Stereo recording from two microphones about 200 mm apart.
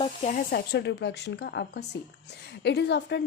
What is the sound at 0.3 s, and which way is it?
A woman's voice, 45° left (ahead or behind).